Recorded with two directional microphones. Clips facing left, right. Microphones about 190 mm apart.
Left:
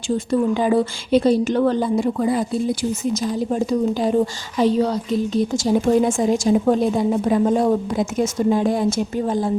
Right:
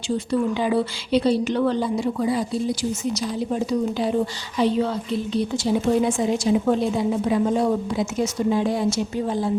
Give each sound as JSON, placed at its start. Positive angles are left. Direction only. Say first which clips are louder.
{"t": 0.3, "sound": "a woman's voice", "louder": "left 4 dB", "side_deg": 45}